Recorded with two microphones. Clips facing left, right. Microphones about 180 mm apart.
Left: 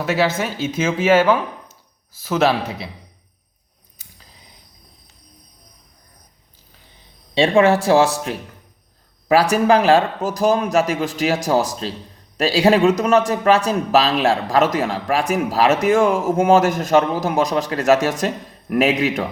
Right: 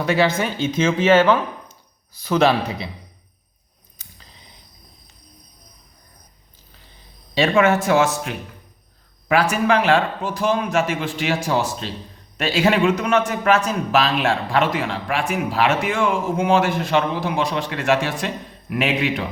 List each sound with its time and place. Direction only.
0.0 s a man's voice: 5° left (ahead or behind)
3.9 s a sound: 5° left (ahead or behind)
7.3 s speech: 30° left (ahead or behind)